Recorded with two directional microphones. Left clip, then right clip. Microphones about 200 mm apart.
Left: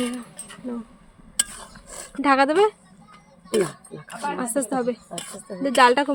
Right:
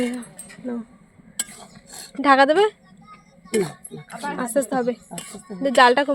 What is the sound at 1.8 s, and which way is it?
Dog, 40° left (ahead or behind).